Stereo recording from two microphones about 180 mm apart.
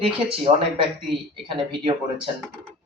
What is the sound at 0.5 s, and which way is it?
Speech, 35° right (ahead or behind).